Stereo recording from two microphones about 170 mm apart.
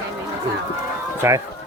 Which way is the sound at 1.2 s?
15° right (ahead or behind).